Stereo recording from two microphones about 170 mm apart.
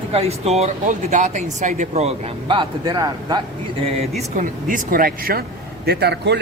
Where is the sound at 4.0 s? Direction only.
45° right (ahead or behind).